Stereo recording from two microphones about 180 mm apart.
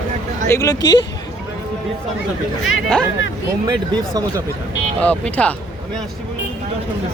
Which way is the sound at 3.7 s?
20° right (ahead or behind).